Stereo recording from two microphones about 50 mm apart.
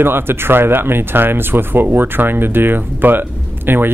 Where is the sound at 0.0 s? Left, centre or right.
Right.